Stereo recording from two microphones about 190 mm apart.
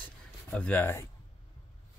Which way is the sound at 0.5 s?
5° left (ahead or behind).